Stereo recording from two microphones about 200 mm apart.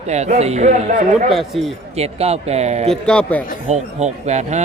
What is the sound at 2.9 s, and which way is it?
Speech, 5° left (ahead or behind).